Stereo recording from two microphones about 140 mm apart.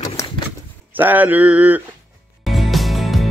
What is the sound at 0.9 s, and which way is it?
Speech, 15° right (ahead or behind).